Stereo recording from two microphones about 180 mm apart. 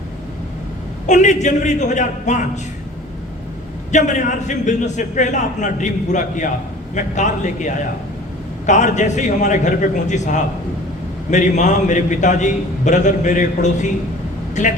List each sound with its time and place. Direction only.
1.0 s a man's voice: 40° left (ahead or behind)
3.9 s a man's voice: 45° left (ahead or behind)